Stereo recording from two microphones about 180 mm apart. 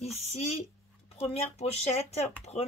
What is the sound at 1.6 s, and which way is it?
Speech, 35° left (ahead or behind).